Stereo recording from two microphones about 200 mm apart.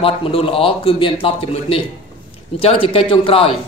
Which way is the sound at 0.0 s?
25° left (ahead or behind).